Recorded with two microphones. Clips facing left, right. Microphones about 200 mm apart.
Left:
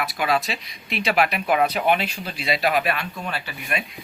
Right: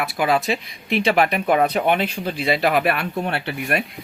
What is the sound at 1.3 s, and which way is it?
Speech, 30° right (ahead or behind).